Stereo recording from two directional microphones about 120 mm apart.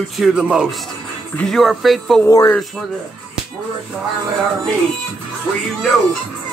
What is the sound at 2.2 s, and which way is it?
Speech, 30° left (ahead or behind).